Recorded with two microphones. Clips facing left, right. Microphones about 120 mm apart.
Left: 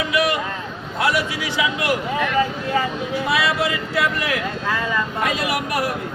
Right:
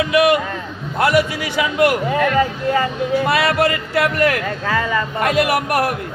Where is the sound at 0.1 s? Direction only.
55° right (ahead or behind).